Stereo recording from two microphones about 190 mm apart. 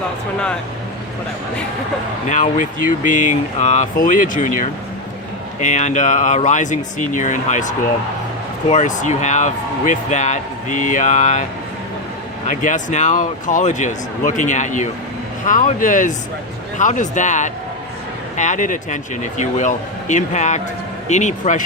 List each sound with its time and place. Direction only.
2.3 s speech: 40° left (ahead or behind)
12.5 s speech: 40° left (ahead or behind)